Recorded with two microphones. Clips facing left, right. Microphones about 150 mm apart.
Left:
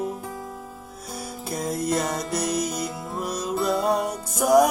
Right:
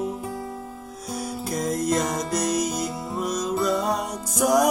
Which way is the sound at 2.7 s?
Centre (ahead or behind).